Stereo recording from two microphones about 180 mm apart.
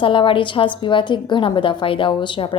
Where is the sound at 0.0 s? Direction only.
30° left (ahead or behind).